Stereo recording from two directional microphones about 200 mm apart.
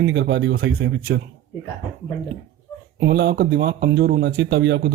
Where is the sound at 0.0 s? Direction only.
60° right (ahead or behind).